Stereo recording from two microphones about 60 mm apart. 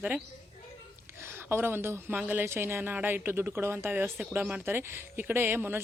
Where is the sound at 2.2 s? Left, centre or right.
Right.